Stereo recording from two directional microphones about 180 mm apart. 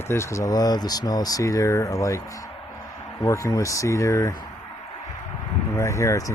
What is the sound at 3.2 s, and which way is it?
Speech, 15° left (ahead or behind).